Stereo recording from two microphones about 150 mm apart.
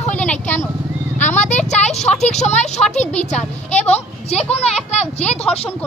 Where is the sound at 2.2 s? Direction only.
50° left (ahead or behind).